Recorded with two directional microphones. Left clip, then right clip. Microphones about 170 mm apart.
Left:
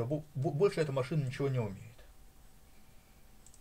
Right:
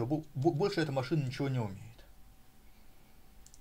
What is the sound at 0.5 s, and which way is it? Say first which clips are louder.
Speech: even; 5° right (ahead or behind).